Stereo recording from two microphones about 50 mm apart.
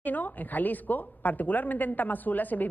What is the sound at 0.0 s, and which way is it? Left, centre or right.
A woman's voice, left.